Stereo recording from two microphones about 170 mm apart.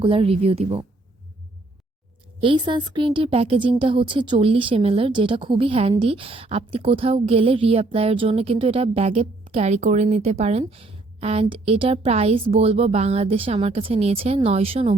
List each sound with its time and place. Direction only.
0.0 s a woman's voice: 35° right (ahead or behind)
2.4 s a woman's voice: 30° right (ahead or behind)